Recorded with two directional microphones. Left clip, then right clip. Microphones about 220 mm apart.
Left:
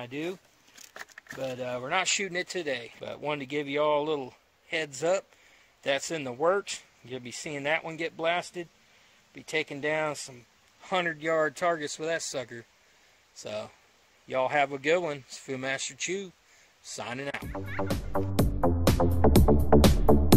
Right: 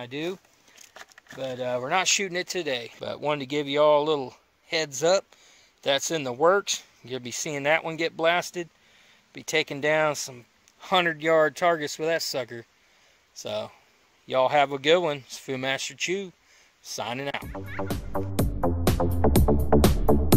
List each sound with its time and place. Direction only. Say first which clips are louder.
0.0 s speech: right 3 dB; 30° right (ahead or behind)
1.4 s speech: right 5 dB; 25° right (ahead or behind)
17.4 s music: even; centre (ahead or behind)